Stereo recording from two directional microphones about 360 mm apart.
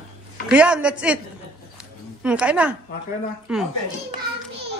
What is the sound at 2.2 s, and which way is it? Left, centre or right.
Speech, centre.